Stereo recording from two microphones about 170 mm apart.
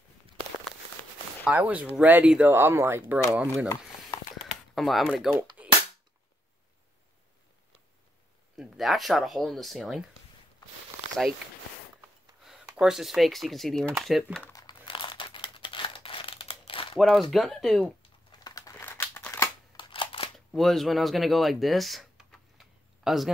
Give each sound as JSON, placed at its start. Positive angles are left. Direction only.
{"t": 1.4, "sound": "speech", "side_deg": -10}
{"t": 3.3, "sound": "speech", "side_deg": 0}
{"t": 4.7, "sound": "speech", "side_deg": 0}
{"t": 5.6, "sound": "cap gun", "side_deg": -10}
{"t": 8.5, "sound": "speech", "side_deg": 0}
{"t": 12.6, "sound": "speech", "side_deg": -5}
{"t": 14.5, "sound": "crumpling", "side_deg": 25}
{"t": 17.0, "sound": "speech", "side_deg": 0}
{"t": 18.3, "sound": "crumpling", "side_deg": 25}
{"t": 19.8, "sound": "a sound", "side_deg": 30}
{"t": 20.3, "sound": "a sound", "side_deg": 0}